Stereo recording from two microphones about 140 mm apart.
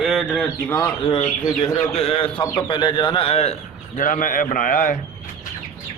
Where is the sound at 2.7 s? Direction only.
35° left (ahead or behind).